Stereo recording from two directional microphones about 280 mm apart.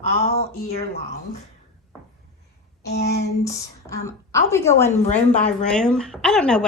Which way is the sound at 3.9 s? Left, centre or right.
Centre.